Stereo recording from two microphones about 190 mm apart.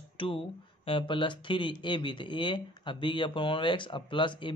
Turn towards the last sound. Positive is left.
turn(degrees=25)  # may be behind; listen again after turning